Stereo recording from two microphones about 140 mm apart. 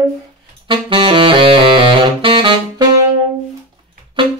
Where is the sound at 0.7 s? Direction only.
40° right (ahead or behind).